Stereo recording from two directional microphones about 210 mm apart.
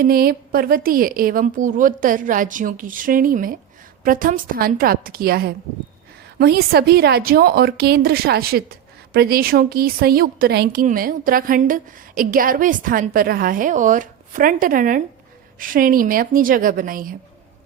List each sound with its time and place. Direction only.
0.0 s a woman's voice: 45° right (ahead or behind)